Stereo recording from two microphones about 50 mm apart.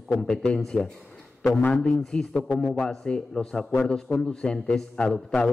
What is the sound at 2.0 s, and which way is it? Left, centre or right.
A man's voice, centre.